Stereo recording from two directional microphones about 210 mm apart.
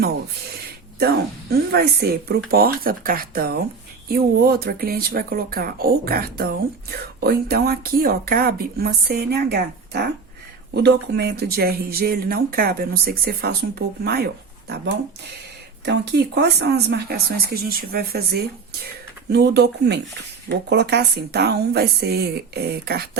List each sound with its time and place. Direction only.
0.9 s speech: 50° right (ahead or behind)
15.8 s speech: 55° right (ahead or behind)